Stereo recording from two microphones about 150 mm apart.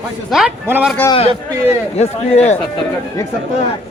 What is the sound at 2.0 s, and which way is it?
Speech, 45° left (ahead or behind).